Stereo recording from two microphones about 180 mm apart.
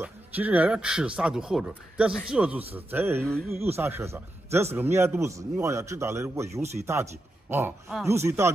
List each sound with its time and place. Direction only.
0.0 s a man's voice: 10° right (ahead or behind)
3.3 s speech: centre (ahead or behind)
3.6 s a man's voice: 15° right (ahead or behind)